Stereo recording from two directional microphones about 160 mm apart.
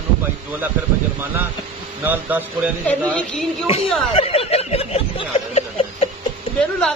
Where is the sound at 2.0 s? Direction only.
10° right (ahead or behind).